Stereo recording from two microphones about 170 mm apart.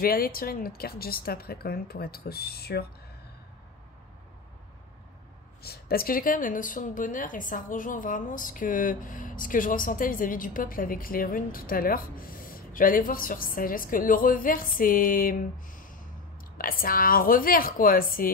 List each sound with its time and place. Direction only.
0.0 s a woman's voice: 60° left (ahead or behind)
5.6 s a woman's voice: 65° left (ahead or behind)